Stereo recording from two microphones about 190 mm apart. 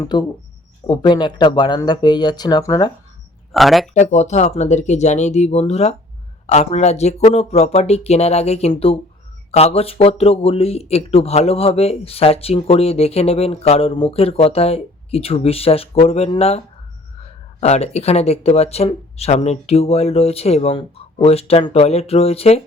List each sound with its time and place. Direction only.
0.0 s speech: 20° left (ahead or behind)
3.5 s speech: centre (ahead or behind)
3.9 s speech: 35° left (ahead or behind)